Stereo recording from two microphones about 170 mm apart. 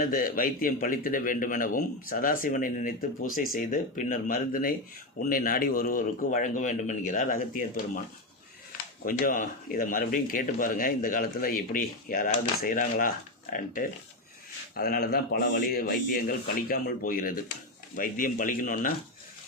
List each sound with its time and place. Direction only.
0.0 s a man's voice: 55° left (ahead or behind)
9.0 s speech: 55° left (ahead or behind)
14.8 s a man's voice: 65° left (ahead or behind)